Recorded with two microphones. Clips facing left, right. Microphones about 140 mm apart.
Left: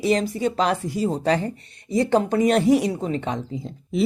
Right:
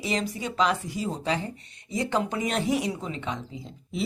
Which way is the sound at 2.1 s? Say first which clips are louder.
Left 9 dB; 50° left (ahead or behind).